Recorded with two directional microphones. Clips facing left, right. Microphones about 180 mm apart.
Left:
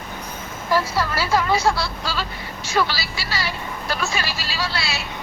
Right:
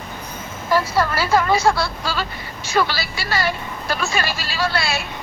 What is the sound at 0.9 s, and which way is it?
A woman's voice, 50° right (ahead or behind).